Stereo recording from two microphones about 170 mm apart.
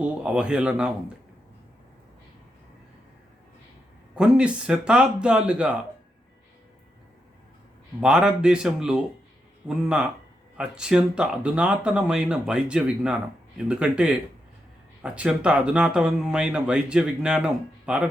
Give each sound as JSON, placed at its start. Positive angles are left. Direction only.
{"t": 0.0, "sound": "speech", "side_deg": -5}
{"t": 4.1, "sound": "speech", "side_deg": -5}
{"t": 8.0, "sound": "speech", "side_deg": -5}